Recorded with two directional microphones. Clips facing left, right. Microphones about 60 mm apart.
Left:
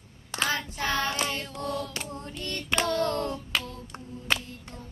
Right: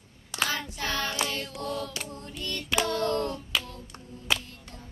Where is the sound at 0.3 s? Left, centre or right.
Left.